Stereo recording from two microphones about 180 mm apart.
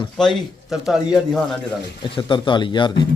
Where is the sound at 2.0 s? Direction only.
25° left (ahead or behind).